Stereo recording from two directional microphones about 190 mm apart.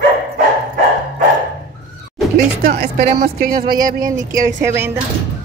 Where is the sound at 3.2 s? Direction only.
55° right (ahead or behind).